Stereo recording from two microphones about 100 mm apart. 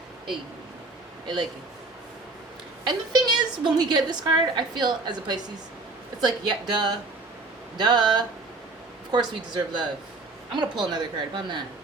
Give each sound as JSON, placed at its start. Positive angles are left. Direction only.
{"t": 2.8, "sound": "a woman's voice", "side_deg": -45}